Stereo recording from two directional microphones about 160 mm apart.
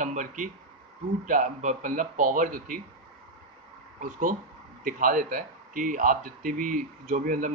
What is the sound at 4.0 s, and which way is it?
Speech, 55° right (ahead or behind).